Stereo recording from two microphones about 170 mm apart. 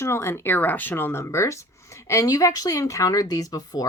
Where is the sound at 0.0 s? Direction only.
15° left (ahead or behind).